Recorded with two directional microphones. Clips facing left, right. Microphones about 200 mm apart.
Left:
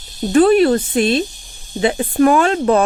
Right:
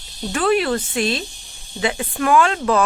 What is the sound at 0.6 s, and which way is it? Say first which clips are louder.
Speech: left 7 dB; 30° left (ahead or behind).